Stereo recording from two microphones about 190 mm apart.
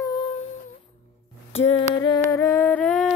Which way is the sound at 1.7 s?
25° left (ahead or behind).